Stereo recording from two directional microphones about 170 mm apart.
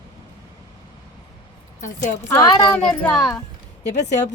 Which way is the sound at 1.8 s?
50° left (ahead or behind).